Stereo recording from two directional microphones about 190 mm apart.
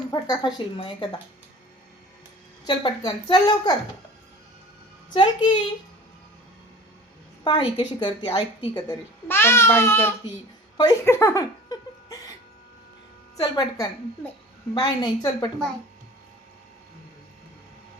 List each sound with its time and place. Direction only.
0.1 s a woman's voice: 20° left (ahead or behind)
2.6 s a woman's voice: 25° left (ahead or behind)
5.1 s a woman's voice: 25° left (ahead or behind)
7.4 s a woman's voice: 25° left (ahead or behind)
9.2 s speech: 10° left (ahead or behind)
10.8 s a sound: 15° left (ahead or behind)
13.4 s a woman's voice: 20° left (ahead or behind)